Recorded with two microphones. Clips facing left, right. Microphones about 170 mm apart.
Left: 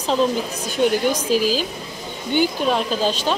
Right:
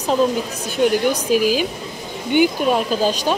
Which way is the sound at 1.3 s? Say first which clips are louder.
Right 3 dB; 50° right (ahead or behind).